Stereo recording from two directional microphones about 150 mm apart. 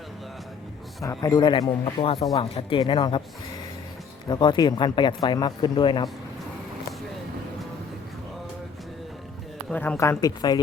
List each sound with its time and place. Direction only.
1.0 s speech: 25° left (ahead or behind)
4.3 s speech: 30° left (ahead or behind)
9.6 s a woman's voice: 10° left (ahead or behind); by 10.6 s 25° left (ahead or behind)